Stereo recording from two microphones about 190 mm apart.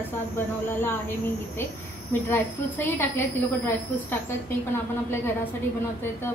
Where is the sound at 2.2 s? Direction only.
10° left (ahead or behind).